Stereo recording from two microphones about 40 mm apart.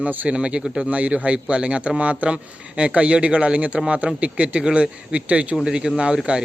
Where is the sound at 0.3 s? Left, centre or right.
Right.